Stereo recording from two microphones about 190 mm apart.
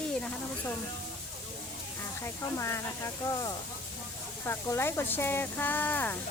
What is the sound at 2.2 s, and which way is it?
Speech, 15° left (ahead or behind).